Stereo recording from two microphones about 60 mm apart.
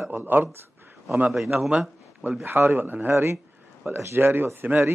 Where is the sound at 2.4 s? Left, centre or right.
Right.